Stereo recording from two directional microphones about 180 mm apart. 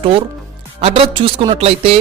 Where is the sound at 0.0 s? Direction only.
30° right (ahead or behind).